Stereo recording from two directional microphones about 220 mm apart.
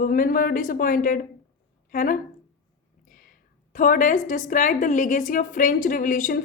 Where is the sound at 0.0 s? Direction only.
40° left (ahead or behind).